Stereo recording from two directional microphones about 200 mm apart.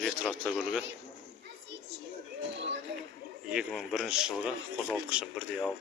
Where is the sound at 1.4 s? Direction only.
55° right (ahead or behind).